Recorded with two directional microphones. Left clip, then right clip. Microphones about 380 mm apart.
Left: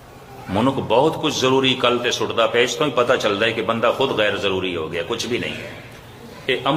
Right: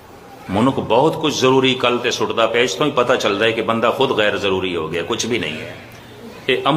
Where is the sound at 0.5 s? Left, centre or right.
Centre.